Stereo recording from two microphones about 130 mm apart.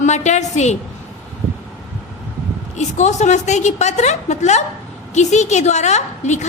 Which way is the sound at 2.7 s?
60° left (ahead or behind).